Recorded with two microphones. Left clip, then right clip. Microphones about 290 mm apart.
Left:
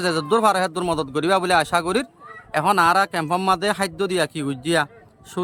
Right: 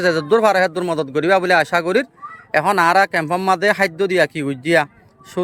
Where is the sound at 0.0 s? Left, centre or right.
Centre.